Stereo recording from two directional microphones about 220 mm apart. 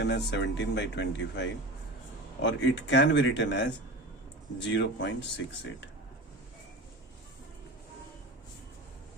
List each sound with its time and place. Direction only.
0.0 s speech: 50° left (ahead or behind)